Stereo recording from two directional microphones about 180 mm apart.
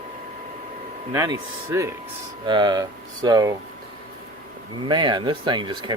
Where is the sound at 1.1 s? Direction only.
15° right (ahead or behind).